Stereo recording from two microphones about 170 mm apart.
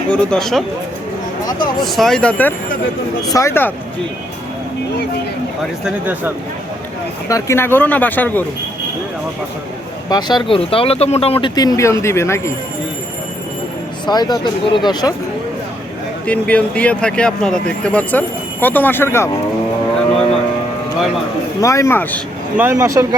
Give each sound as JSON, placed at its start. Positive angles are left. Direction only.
{"t": 0.1, "sound": "speech", "side_deg": 5}
{"t": 1.8, "sound": "speech", "side_deg": 0}
{"t": 5.8, "sound": "speech", "side_deg": -10}
{"t": 7.3, "sound": "speech", "side_deg": 20}
{"t": 10.1, "sound": "speech", "side_deg": 25}
{"t": 14.1, "sound": "speech", "side_deg": 25}
{"t": 16.2, "sound": "speech", "side_deg": 10}
{"t": 21.6, "sound": "speech", "side_deg": 20}
{"t": 22.5, "sound": "speech", "side_deg": -15}